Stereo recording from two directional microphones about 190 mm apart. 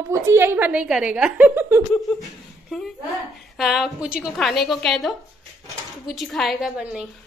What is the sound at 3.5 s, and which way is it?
A woman's voice, centre (ahead or behind).